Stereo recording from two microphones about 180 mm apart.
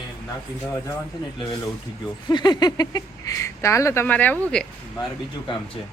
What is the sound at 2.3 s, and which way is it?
Speech, 25° left (ahead or behind).